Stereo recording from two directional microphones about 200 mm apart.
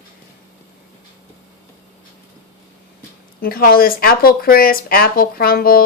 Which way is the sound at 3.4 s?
50° left (ahead or behind).